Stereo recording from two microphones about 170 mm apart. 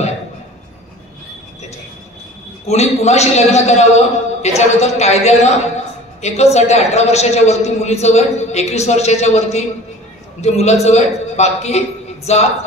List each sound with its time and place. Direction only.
2.6 s a man's voice: 40° left (ahead or behind)